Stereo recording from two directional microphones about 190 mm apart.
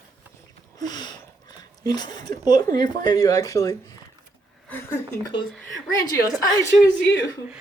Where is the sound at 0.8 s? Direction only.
20° left (ahead or behind).